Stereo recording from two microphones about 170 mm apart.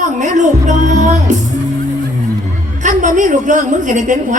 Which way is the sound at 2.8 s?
45° right (ahead or behind).